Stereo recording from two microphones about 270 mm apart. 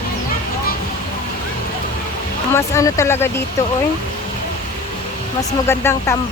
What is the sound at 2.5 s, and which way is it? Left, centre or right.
Speech, centre.